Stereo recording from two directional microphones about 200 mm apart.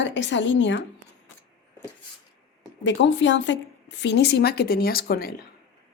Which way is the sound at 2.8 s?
65° left (ahead or behind).